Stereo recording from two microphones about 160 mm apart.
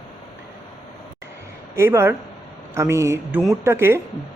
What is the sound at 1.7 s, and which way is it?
Speech, 15° right (ahead or behind).